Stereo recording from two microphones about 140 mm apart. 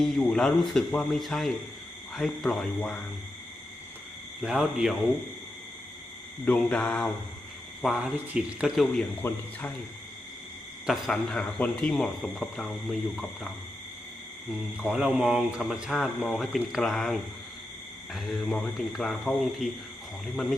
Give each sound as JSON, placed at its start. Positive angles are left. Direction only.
{"t": 0.0, "sound": "speech", "side_deg": 5}
{"t": 4.4, "sound": "speech", "side_deg": -5}
{"t": 6.4, "sound": "mantra", "side_deg": 10}
{"t": 7.8, "sound": "speech", "side_deg": -5}
{"t": 9.2, "sound": "mantra", "side_deg": 15}
{"t": 10.8, "sound": "speech", "side_deg": 0}
{"t": 14.8, "sound": "speech", "side_deg": -5}